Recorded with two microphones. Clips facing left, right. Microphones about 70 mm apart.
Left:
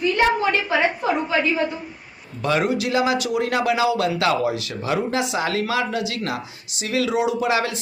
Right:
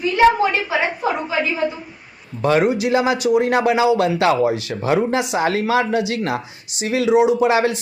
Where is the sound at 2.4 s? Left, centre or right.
Right.